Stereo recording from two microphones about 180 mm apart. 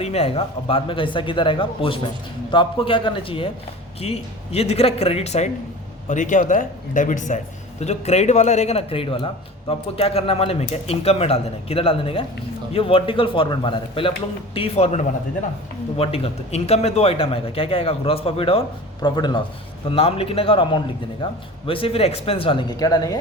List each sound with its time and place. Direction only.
0.0 s a man's voice: 35° left (ahead or behind)